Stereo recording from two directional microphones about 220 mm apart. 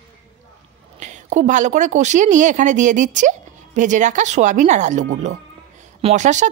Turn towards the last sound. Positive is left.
turn(degrees=-35)  # may be behind; listen again after turning